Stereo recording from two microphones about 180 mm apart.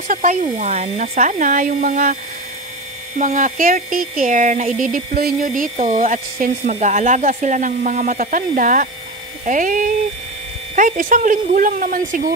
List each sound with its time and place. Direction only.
0.1 s speech: 40° right (ahead or behind)
3.2 s speech: 45° right (ahead or behind)